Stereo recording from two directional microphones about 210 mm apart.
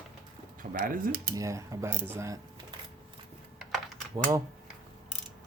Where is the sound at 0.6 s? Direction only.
40° right (ahead or behind).